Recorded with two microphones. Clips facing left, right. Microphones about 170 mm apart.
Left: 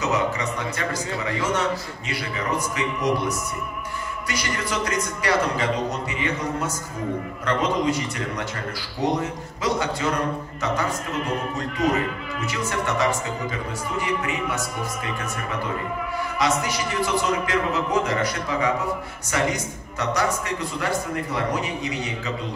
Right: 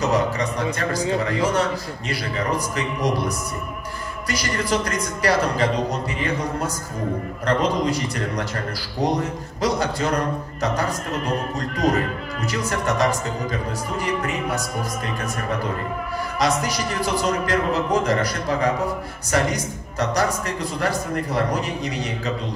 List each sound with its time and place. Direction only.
0.0 s speech: 35° right (ahead or behind)
2.0 s speech: 40° right (ahead or behind)
16.3 s speech: 40° right (ahead or behind)